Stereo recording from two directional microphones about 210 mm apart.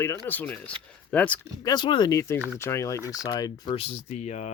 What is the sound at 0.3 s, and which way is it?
Speech, 5° left (ahead or behind).